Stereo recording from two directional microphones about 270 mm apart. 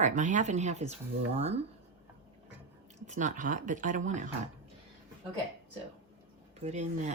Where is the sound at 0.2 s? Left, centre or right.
Right.